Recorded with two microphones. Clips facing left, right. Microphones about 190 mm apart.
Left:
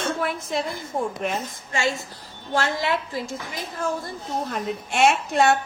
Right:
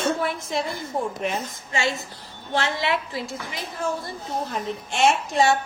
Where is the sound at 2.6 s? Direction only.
45° left (ahead or behind).